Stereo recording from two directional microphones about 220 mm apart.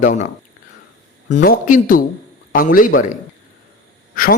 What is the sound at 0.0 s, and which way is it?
Speech, 35° left (ahead or behind).